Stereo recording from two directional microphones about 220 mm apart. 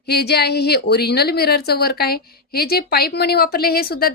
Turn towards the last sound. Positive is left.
turn(degrees=45)  # may be behind; listen again after turning